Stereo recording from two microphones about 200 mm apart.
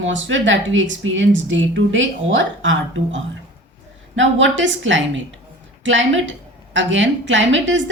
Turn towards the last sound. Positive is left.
turn(degrees=-65)  # may be behind; listen again after turning